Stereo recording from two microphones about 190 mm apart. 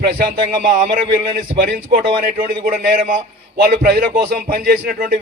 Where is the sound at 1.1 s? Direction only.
55° right (ahead or behind).